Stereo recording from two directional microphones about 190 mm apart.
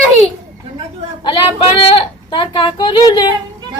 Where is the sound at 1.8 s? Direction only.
30° left (ahead or behind).